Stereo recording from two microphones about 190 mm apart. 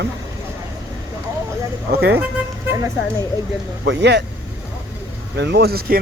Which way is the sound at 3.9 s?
65° right (ahead or behind).